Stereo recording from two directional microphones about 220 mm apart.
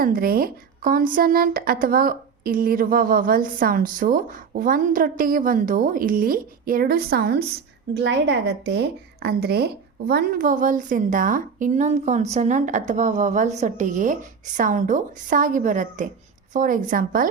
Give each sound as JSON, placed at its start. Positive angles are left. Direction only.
{"t": 0.0, "sound": "a woman's voice", "side_deg": -40}